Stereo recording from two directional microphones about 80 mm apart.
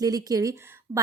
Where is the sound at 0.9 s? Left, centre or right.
Right.